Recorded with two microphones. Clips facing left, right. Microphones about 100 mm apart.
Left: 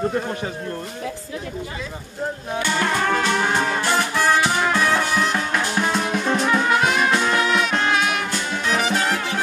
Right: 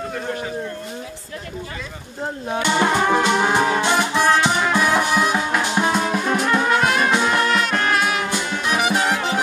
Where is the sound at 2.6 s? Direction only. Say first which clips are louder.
Right 3 dB; 20° right (ahead or behind); by 7.1 s centre (ahead or behind).